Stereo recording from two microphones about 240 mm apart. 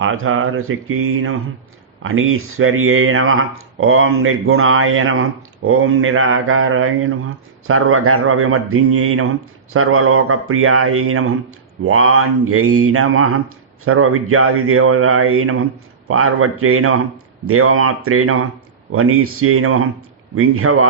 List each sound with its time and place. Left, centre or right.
0.0 s speech: right